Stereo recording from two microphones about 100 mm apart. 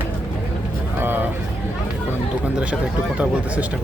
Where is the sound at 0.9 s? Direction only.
20° right (ahead or behind).